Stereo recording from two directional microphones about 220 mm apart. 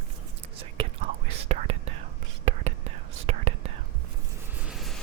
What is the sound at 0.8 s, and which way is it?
Whispering, 25° right (ahead or behind).